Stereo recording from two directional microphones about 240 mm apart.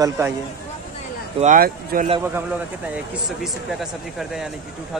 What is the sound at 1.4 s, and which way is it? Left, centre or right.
Speech, right.